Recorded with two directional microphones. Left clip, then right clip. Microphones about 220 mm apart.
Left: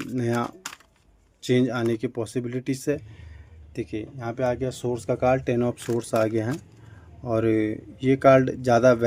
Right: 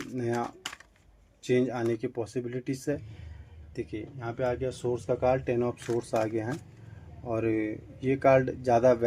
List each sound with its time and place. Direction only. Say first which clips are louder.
0.1 s speech: left 5 dB; 45° left (ahead or behind)
1.5 s speech: left 4 dB; 45° left (ahead or behind)